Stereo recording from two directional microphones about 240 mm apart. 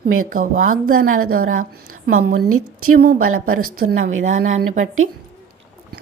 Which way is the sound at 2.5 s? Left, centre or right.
Right.